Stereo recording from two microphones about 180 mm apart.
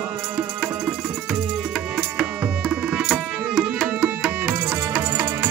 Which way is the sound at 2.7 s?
5° right (ahead or behind).